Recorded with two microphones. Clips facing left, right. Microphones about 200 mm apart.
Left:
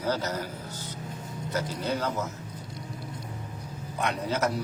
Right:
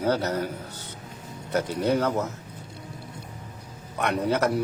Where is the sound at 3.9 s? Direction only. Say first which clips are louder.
Right 5 dB; 65° right (ahead or behind).